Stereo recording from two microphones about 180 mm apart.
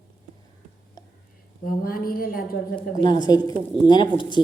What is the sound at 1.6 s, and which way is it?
A woman's voice, 55° left (ahead or behind).